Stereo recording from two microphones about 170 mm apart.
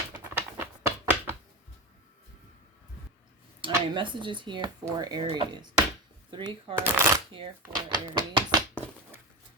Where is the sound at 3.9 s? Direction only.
30° right (ahead or behind).